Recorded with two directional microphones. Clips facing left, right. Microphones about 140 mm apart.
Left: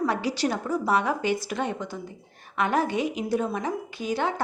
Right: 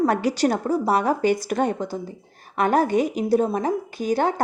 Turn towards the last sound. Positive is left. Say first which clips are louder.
# right 5 dB
turn(degrees=-40)  # may be behind; listen again after turning